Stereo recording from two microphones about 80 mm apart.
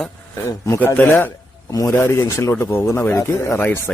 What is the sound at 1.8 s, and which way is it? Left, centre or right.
Speech, left.